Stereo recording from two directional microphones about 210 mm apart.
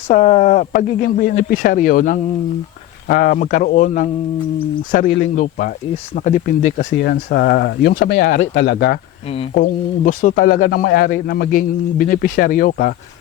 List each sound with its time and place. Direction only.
0.1 s speech: 30° left (ahead or behind)
6.7 s a man's voice: 55° left (ahead or behind)
9.6 s a man's voice: 40° left (ahead or behind)